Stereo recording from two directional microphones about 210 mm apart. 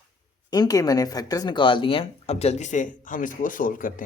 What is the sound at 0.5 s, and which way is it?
Speech, 15° left (ahead or behind).